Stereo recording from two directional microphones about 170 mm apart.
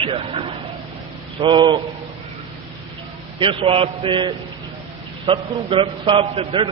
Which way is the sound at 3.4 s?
30° right (ahead or behind).